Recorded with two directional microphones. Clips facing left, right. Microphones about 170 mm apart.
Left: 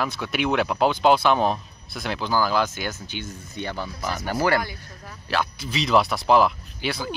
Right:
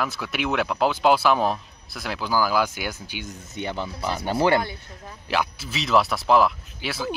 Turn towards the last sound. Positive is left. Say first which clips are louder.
# left 1 dB
turn(degrees=0)  # may be behind; listen again after turning